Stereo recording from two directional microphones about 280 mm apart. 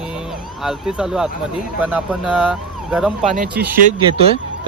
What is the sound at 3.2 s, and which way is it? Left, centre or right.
Speech, right.